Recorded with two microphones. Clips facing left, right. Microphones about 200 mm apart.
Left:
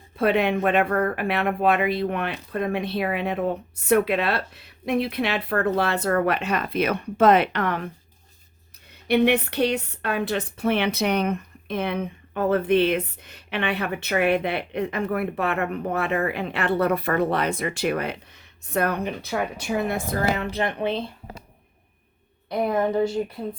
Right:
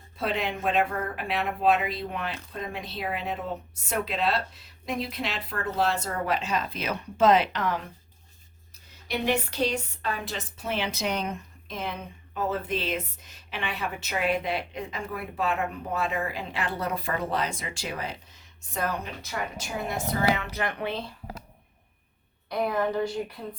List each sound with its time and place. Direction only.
0.2 s a woman's voice: 60° left (ahead or behind)
8.9 s a woman's voice: 60° left (ahead or behind)
20.5 s a woman's voice: 25° left (ahead or behind)
22.4 s a woman's voice: 25° left (ahead or behind)